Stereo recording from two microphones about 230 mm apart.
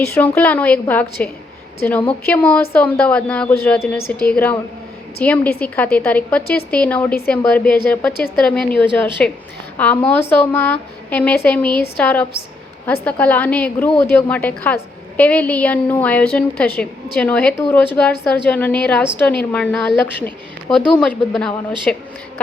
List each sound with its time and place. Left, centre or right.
0.0 s a woman's voice: centre